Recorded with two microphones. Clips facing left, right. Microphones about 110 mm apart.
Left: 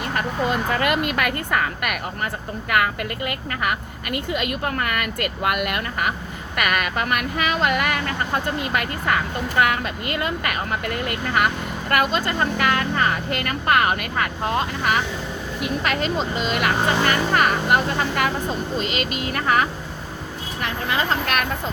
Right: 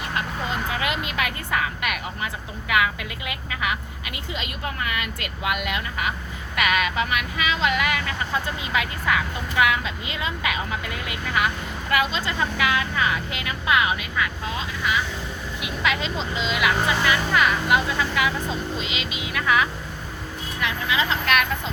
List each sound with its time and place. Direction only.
0.1 s speech: 55° left (ahead or behind)